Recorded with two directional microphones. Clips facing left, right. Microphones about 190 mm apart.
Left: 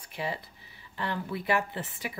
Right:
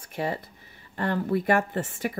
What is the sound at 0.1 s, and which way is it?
Speech, 45° right (ahead or behind).